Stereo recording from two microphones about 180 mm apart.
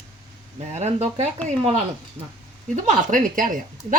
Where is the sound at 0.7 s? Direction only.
40° right (ahead or behind).